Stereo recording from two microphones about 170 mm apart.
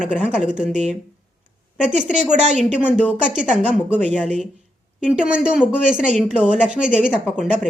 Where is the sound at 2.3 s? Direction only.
45° right (ahead or behind).